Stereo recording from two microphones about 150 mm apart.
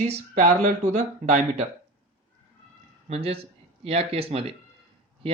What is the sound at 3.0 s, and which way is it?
Speech, 40° right (ahead or behind).